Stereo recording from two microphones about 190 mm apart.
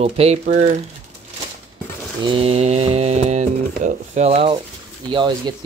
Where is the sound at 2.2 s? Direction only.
30° right (ahead or behind).